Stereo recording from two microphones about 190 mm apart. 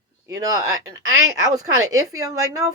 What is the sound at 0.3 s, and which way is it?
Speech, 20° right (ahead or behind).